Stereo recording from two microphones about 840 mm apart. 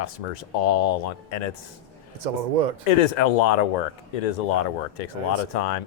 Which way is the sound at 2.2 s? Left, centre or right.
Right.